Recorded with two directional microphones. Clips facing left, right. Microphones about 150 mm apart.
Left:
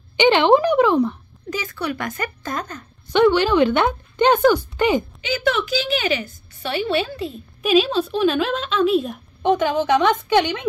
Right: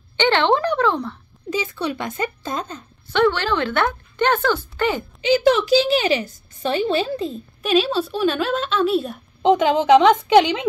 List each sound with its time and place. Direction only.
0.2 s speech: 15° left (ahead or behind)
1.5 s speech: 25° right (ahead or behind)
3.1 s speech: 15° left (ahead or behind)
5.2 s a woman's voice: 30° right (ahead or behind)
7.6 s speech: 5° left (ahead or behind)
9.4 s speech: 20° right (ahead or behind)